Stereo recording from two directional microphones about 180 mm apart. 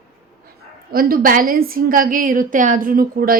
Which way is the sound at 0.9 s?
55° right (ahead or behind).